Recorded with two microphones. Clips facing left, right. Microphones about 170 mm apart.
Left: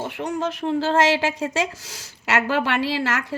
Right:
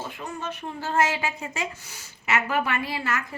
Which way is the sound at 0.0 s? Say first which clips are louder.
Left 8 dB; 75° left (ahead or behind).